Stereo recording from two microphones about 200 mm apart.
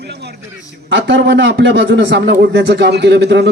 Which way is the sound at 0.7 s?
65° right (ahead or behind).